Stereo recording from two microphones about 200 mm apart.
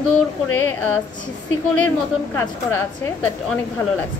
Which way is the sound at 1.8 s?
10° left (ahead or behind).